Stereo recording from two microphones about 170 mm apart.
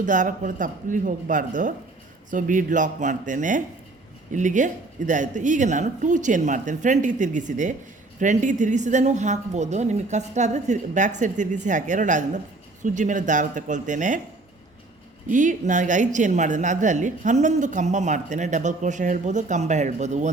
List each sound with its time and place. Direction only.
0.0 s speech: 50° right (ahead or behind)
15.3 s speech: 50° right (ahead or behind)